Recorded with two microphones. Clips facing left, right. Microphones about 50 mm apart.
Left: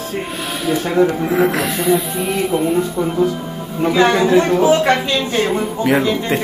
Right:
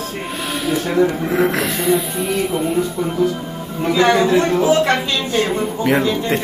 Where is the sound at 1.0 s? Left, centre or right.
Centre.